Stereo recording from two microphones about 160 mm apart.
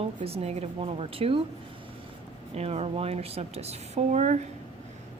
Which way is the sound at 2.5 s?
40° right (ahead or behind).